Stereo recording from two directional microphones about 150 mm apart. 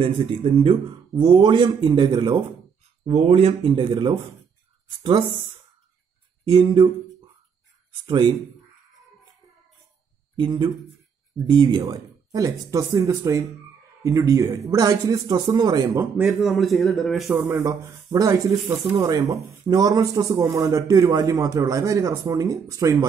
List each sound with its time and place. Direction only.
0.0 s speech: 35° right (ahead or behind)
3.1 s speech: 45° right (ahead or behind)
6.4 s speech: 30° right (ahead or behind)
8.1 s speech: 30° right (ahead or behind)
10.3 s speech: 30° right (ahead or behind)
16.3 s a man's voice: centre (ahead or behind)
17.4 s speech: 20° right (ahead or behind)